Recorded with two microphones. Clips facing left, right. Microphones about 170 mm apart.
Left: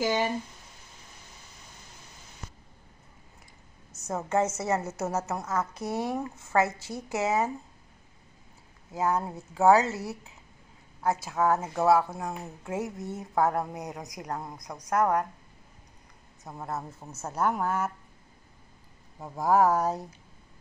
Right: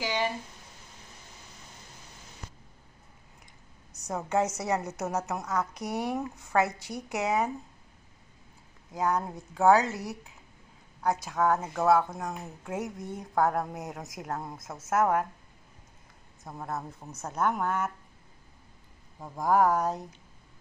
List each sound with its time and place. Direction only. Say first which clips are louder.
0.0 s speech: left 3 dB; 45° left (ahead or behind)
3.9 s a woman's voice: left 1 dB; centre (ahead or behind)
8.9 s a woman's voice: left 1 dB; 5° left (ahead or behind)
16.4 s a woman's voice: even; centre (ahead or behind)
19.1 s a woman's voice: left 1 dB; 5° left (ahead or behind)